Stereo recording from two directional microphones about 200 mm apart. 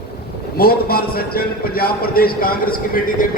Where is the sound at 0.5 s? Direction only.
50° left (ahead or behind).